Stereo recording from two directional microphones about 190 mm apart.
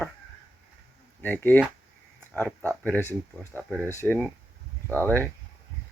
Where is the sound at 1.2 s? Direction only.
10° left (ahead or behind).